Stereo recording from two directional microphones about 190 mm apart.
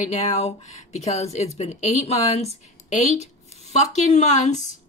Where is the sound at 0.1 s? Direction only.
35° left (ahead or behind).